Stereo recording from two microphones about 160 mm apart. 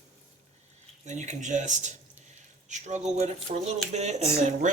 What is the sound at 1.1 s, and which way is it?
Speech, 45° right (ahead or behind).